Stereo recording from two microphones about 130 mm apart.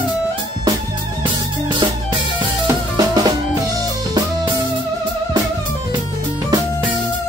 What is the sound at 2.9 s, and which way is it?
Drum, 30° right (ahead or behind).